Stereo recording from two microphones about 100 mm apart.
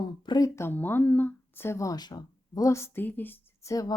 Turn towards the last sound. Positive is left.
turn(degrees=35)  # may be behind; listen again after turning